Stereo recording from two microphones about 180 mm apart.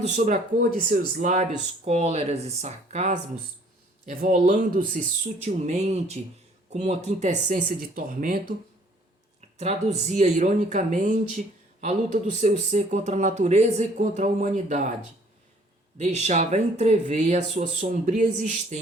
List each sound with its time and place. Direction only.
0.2 s speech: 45° right (ahead or behind)
9.6 s speech: 40° right (ahead or behind)
16.0 s speech: 40° right (ahead or behind)